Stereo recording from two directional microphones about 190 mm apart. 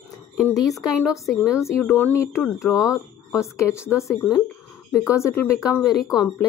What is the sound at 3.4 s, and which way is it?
Speech, 15° left (ahead or behind).